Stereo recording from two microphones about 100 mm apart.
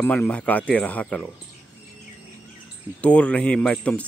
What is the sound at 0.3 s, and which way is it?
Speech, 15° left (ahead or behind).